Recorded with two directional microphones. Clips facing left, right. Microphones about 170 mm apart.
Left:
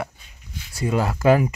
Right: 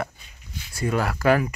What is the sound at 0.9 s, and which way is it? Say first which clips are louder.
Speech: left 3 dB; 20° left (ahead or behind).